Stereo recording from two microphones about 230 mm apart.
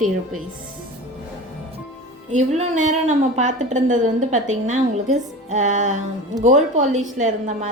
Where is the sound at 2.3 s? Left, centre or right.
Right.